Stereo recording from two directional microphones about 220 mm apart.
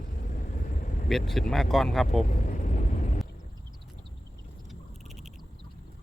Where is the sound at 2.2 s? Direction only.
35° left (ahead or behind).